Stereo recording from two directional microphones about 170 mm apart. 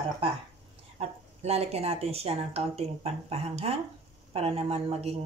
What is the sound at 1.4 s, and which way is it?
Speech, 40° right (ahead or behind).